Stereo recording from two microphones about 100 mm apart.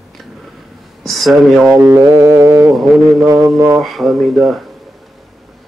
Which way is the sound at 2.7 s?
Centre (ahead or behind).